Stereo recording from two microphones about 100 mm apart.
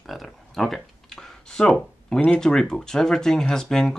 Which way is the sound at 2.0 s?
10° left (ahead or behind).